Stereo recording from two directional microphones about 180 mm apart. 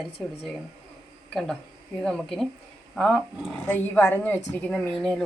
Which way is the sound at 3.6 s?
10° left (ahead or behind).